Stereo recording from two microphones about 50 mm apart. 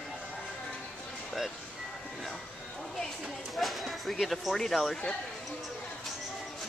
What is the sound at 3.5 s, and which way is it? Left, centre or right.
Speech, centre.